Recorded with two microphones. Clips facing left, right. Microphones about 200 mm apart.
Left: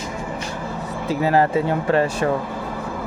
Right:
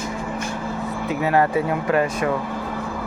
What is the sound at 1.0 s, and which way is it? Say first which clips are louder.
Speech: left 2 dB; 30° left (ahead or behind).